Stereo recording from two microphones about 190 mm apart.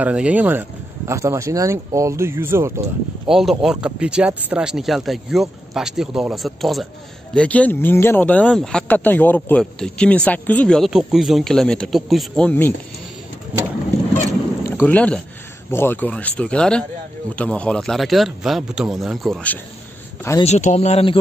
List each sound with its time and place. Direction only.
0.0 s speech: 5° right (ahead or behind)
3.3 s speech: centre (ahead or behind)
14.6 s speech: 10° left (ahead or behind)
20.4 s speech: 35° left (ahead or behind)